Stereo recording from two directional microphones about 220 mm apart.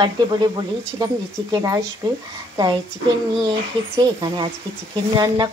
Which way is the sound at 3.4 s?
20° right (ahead or behind).